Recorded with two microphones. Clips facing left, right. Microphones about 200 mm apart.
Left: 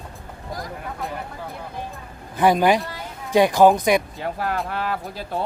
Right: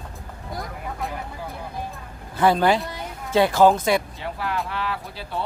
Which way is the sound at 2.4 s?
15° left (ahead or behind).